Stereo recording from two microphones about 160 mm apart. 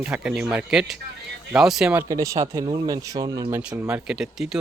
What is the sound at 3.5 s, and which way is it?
Speech, 5° right (ahead or behind).